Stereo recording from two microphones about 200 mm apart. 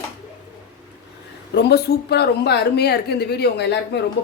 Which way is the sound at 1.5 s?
55° left (ahead or behind).